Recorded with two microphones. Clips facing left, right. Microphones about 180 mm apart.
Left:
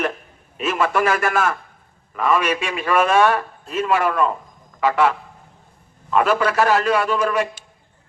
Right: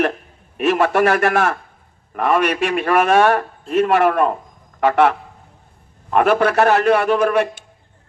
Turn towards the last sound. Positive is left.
turn(degrees=-60)  # may be behind; listen again after turning